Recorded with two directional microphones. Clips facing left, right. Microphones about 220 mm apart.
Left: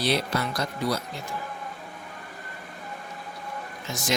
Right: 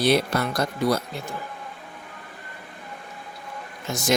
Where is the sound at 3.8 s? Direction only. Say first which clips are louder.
Right 6 dB; 45° right (ahead or behind).